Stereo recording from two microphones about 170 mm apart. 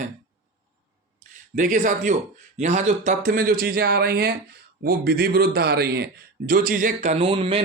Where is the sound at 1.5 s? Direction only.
50° right (ahead or behind).